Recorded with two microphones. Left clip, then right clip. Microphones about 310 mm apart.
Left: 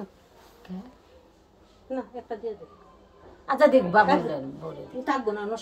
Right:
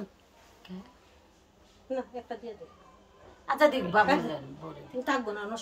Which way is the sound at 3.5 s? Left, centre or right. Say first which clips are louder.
Left 6 dB; centre.